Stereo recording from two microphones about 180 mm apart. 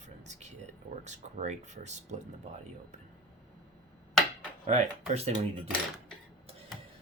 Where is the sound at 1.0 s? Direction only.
40° right (ahead or behind).